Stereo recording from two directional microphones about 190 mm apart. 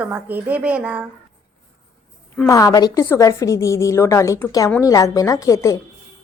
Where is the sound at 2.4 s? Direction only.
20° left (ahead or behind).